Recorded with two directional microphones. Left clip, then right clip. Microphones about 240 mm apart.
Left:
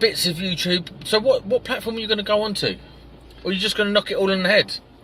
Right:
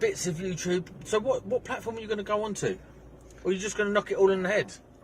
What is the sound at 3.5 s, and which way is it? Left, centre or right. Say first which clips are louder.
Speech: left 7 dB; left.